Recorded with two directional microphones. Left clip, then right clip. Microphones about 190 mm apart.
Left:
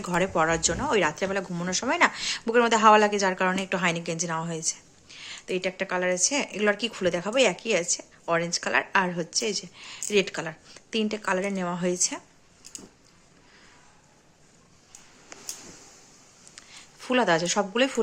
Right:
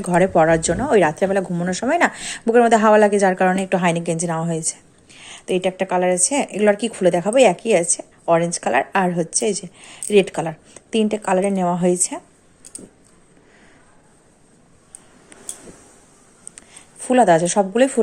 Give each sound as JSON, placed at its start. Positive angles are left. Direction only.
{"t": 0.0, "sound": "a woman's voice", "side_deg": -25}
{"t": 8.2, "sound": "a woman's voice", "side_deg": -15}
{"t": 17.0, "sound": "a woman's voice", "side_deg": -15}